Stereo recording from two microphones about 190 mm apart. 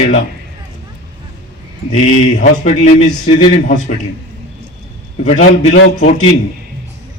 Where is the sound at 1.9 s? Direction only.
40° left (ahead or behind).